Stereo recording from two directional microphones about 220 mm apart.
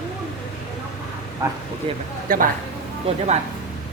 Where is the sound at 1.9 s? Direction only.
25° right (ahead or behind).